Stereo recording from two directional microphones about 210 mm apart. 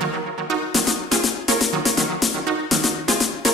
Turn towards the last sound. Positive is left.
turn(degrees=0)  # may be behind; listen again after turning